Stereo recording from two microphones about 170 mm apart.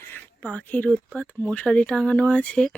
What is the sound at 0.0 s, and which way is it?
Speech, 10° left (ahead or behind).